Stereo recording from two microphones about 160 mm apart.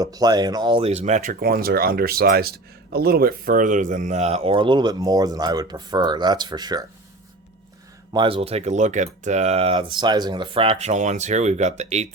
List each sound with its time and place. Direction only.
0.0 s speech: 25° right (ahead or behind)
8.1 s speech: 30° right (ahead or behind)